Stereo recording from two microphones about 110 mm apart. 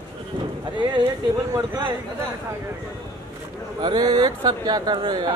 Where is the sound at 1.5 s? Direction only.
30° right (ahead or behind).